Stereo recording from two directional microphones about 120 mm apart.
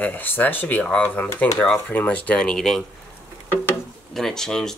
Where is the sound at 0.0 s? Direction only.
15° left (ahead or behind).